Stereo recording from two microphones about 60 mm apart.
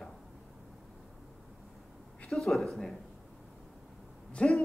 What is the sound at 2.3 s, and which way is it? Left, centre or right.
Speech, centre.